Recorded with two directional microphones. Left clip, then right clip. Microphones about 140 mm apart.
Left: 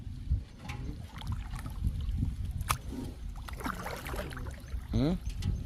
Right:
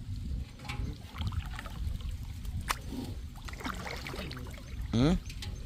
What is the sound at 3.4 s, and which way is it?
Boat, 55° left (ahead or behind).